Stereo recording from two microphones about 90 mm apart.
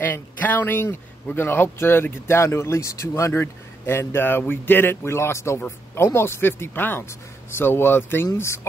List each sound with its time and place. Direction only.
0.0 s speech: 20° left (ahead or behind)